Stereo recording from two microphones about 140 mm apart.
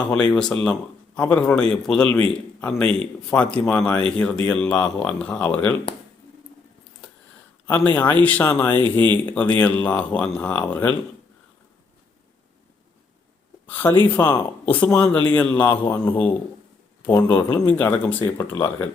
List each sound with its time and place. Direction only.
0.1 s a man's voice: 5° left (ahead or behind)
7.7 s speech: 15° left (ahead or behind)
13.7 s speech: 15° left (ahead or behind)
15.6 s a man's voice: 35° left (ahead or behind)
15.9 s speech: 10° left (ahead or behind)